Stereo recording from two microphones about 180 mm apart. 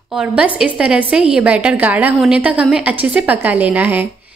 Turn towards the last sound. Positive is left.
turn(degrees=-10)  # may be behind; listen again after turning